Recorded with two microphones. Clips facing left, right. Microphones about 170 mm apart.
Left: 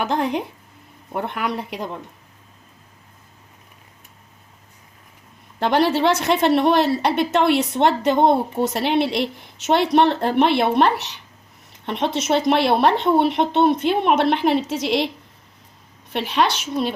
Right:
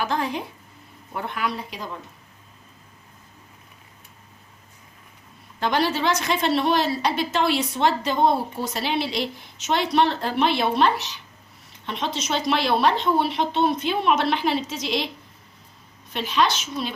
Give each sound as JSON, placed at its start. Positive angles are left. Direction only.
{"t": 0.0, "sound": "speech", "side_deg": 65}
{"t": 5.5, "sound": "speech", "side_deg": 60}
{"t": 16.1, "sound": "speech", "side_deg": 65}